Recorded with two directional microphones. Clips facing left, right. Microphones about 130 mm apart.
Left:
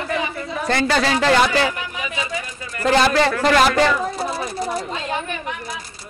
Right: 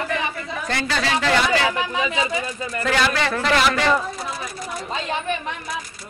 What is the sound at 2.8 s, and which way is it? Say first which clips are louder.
Speech: left 6 dB; 35° left (ahead or behind).